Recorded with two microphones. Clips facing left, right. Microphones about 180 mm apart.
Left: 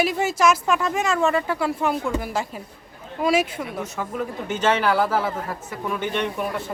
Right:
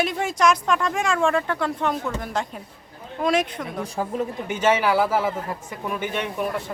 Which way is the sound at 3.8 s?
35° right (ahead or behind).